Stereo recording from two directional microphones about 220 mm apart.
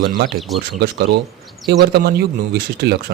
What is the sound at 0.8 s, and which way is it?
Speech, 50° right (ahead or behind).